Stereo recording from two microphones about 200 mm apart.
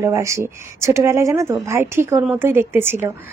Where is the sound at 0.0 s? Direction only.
15° right (ahead or behind).